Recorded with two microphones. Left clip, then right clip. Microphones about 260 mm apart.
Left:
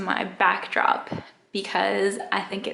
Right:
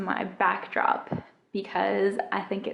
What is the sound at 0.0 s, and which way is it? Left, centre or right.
A woman's voice, centre.